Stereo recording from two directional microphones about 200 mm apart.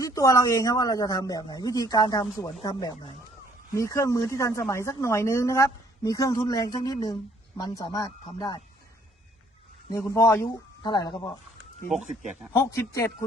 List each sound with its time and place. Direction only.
0.0 s speech: 15° left (ahead or behind)
9.9 s speech: 15° left (ahead or behind)
12.5 s speech: 15° left (ahead or behind)